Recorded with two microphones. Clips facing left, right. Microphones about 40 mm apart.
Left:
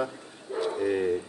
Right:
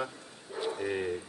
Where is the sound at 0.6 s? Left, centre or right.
Centre.